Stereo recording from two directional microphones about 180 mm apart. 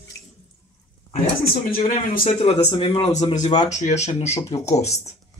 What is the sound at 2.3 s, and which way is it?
Speech, 30° left (ahead or behind).